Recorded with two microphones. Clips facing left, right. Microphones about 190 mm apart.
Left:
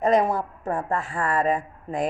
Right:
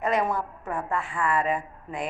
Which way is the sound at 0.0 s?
35° left (ahead or behind).